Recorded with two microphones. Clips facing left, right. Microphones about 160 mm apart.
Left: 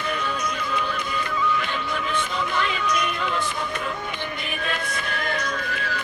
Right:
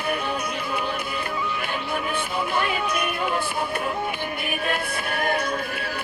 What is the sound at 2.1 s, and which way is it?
Music, 55° right (ahead or behind).